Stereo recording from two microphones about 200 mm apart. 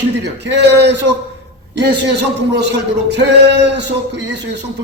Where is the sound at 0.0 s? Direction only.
60° right (ahead or behind).